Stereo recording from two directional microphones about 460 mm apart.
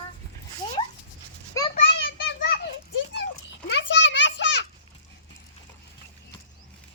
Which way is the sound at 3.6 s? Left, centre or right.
Left.